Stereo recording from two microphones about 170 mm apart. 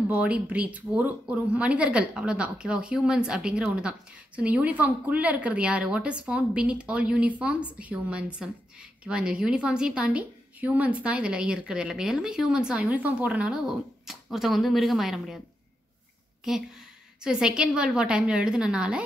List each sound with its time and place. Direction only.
0.1 s a woman's voice: 10° right (ahead or behind)
16.5 s a woman's voice: 5° right (ahead or behind)